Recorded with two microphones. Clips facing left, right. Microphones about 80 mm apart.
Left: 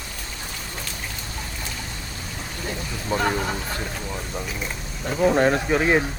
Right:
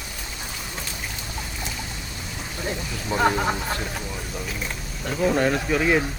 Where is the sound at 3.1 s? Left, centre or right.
Centre.